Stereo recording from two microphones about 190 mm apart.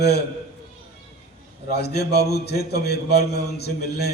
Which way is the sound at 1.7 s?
60° left (ahead or behind).